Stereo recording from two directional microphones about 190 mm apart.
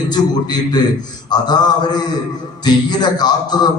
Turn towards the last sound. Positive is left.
turn(degrees=20)  # may be behind; listen again after turning